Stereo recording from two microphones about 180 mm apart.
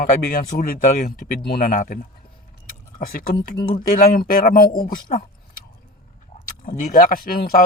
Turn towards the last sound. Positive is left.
turn(degrees=55)  # may be behind; listen again after turning